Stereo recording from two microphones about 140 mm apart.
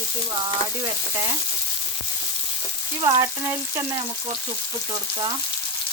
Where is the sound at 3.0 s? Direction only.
25° right (ahead or behind).